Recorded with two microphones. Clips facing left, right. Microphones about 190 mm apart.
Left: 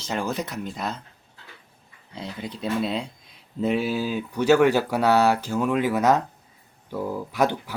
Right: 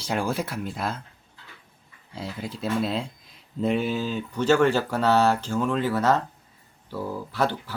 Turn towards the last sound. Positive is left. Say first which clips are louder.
# left 3 dB
turn(degrees=15)  # may be behind; listen again after turning